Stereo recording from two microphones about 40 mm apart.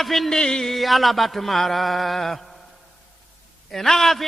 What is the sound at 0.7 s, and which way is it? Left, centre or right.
A man's voice, centre.